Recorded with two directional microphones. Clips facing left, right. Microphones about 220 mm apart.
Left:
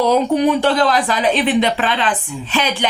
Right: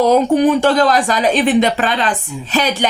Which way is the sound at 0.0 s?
45° right (ahead or behind).